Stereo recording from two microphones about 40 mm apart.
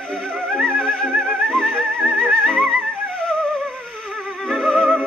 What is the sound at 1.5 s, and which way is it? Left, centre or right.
Music, centre.